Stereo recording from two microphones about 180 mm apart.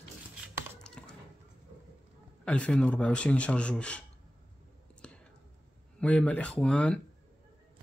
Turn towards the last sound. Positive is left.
turn(degrees=5)  # may be behind; listen again after turning